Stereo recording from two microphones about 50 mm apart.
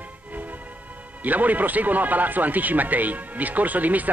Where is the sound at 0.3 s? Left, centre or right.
Right.